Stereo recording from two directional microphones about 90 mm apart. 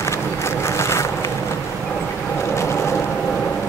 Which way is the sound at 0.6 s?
30° left (ahead or behind).